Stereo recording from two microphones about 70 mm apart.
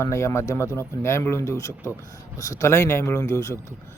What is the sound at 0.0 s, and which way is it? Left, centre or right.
Speech, left.